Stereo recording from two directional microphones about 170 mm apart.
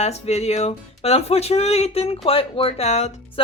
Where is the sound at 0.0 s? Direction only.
40° left (ahead or behind).